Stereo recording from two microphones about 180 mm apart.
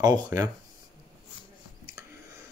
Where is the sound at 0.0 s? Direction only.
20° right (ahead or behind).